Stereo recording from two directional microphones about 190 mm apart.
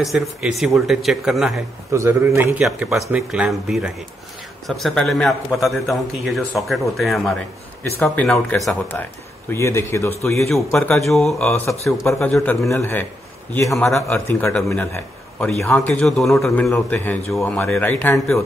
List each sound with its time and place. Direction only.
0.0 s a man's voice: centre (ahead or behind)
1.9 s a man's voice: 15° right (ahead or behind)
2.6 s a man's voice: centre (ahead or behind); by 10.4 s 15° left (ahead or behind)
10.8 s a man's voice: centre (ahead or behind)